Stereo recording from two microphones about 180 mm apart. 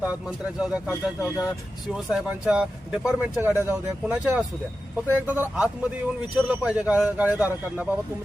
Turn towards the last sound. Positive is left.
turn(degrees=-10)  # may be behind; listen again after turning